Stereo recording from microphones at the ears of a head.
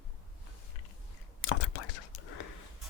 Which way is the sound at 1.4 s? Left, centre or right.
Left.